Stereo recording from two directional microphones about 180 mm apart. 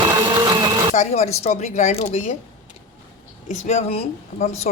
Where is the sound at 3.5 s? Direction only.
40° left (ahead or behind).